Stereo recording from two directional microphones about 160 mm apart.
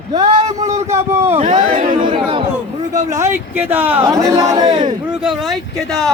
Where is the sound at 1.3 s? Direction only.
35° right (ahead or behind).